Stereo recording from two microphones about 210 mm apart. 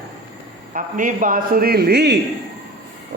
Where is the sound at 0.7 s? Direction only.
40° right (ahead or behind).